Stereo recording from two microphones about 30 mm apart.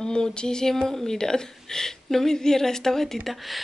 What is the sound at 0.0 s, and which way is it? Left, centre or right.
Speech, left.